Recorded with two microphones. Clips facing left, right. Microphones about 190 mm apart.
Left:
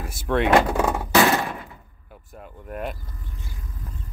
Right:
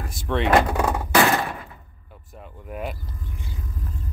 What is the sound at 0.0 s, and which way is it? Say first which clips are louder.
Door: left 2 dB; 5° left (ahead or behind).